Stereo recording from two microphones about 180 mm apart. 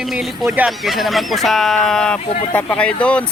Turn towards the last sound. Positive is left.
turn(degrees=5)  # may be behind; listen again after turning